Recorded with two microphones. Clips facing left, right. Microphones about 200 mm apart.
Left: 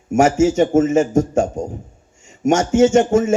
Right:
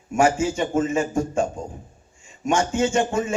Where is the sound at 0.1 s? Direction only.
45° left (ahead or behind).